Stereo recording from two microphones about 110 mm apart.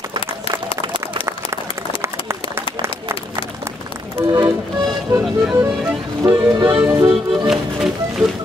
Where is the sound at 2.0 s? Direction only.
25° right (ahead or behind).